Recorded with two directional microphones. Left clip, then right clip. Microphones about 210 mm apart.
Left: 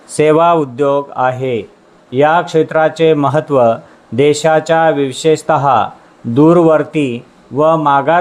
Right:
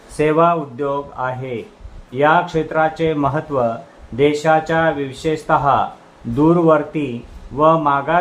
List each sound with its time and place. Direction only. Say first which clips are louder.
0.2 s speech: left 5 dB; 35° left (ahead or behind)